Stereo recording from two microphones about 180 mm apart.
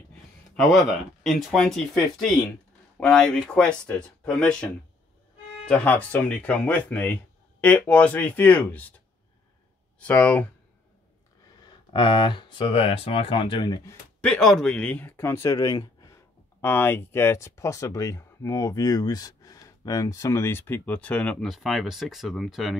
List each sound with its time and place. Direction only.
0.6 s speech: centre (ahead or behind)
9.9 s speech: 10° left (ahead or behind)
11.6 s speech: 25° left (ahead or behind)
14.2 s speech: 5° left (ahead or behind)